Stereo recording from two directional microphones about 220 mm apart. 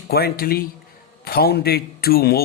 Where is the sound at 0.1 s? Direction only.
45° left (ahead or behind).